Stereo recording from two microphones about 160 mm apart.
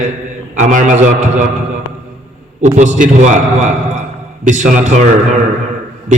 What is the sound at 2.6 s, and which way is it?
A man's voice, 50° right (ahead or behind).